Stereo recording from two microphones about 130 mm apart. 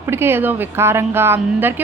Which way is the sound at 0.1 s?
20° right (ahead or behind).